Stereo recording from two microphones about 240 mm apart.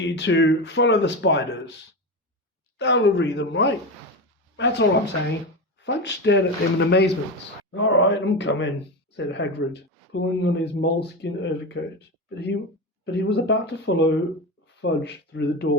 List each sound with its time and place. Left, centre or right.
0.0 s speech: left
2.7 s speech: left